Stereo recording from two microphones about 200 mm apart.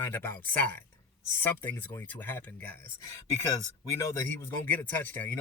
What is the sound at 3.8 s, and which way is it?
Speech, 15° left (ahead or behind).